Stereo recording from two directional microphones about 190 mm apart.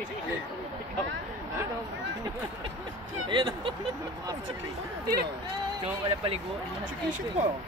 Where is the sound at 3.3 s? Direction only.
25° right (ahead or behind).